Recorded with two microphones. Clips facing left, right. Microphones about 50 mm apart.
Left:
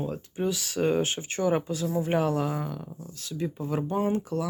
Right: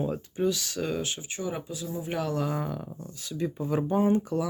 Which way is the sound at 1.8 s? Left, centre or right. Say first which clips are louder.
Left 7 dB; left.